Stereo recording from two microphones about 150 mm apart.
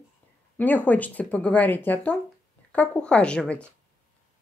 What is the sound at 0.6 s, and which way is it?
Speech, 10° left (ahead or behind).